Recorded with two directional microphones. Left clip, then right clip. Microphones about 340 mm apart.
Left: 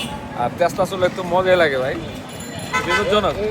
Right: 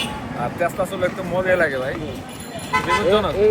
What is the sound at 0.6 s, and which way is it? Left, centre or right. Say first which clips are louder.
Speech: left 3 dB; centre.